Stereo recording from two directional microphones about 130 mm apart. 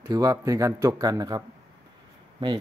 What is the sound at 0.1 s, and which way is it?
Speech, 30° right (ahead or behind).